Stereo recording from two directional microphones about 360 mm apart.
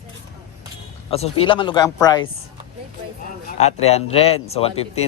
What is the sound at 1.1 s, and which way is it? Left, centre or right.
Speech, centre.